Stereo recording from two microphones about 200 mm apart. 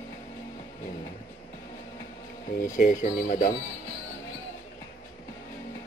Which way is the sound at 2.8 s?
35° left (ahead or behind).